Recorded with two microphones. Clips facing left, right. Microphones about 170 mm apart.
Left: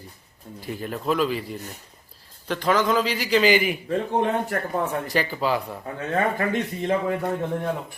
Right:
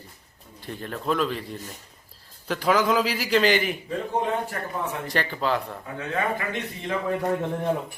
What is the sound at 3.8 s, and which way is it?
Speech, 65° left (ahead or behind).